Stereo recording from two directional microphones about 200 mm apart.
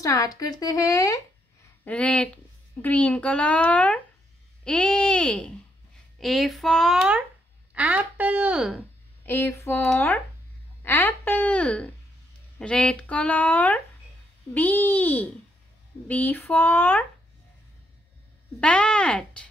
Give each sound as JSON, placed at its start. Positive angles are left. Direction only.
{"t": 0.0, "sound": "a woman's voice", "side_deg": 15}
{"t": 9.2, "sound": "a woman's voice", "side_deg": 10}
{"t": 18.6, "sound": "speech", "side_deg": 5}